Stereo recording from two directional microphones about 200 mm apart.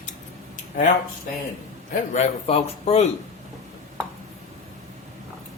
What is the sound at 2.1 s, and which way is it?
Speech, 30° left (ahead or behind).